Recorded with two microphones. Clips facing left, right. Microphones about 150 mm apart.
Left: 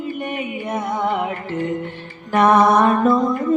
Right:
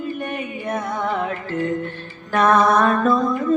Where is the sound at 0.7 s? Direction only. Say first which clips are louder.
Left 3 dB; 20° left (ahead or behind).